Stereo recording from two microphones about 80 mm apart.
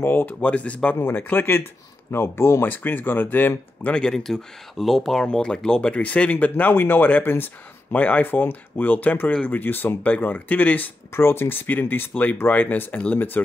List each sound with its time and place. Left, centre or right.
0.0 s speech: left
0.9 s speech: left
2.7 s speech: left
3.9 s speech: centre
11.1 s speech: left